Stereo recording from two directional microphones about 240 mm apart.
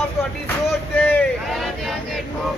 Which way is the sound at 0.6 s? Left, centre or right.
Centre.